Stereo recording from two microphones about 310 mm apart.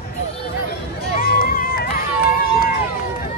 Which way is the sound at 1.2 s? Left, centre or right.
Left.